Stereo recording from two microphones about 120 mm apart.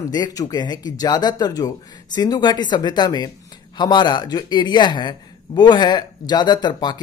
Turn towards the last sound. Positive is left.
turn(degrees=35)  # may be behind; listen again after turning